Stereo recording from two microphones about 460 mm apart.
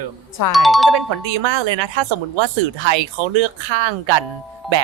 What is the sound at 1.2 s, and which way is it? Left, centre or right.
Speech, right.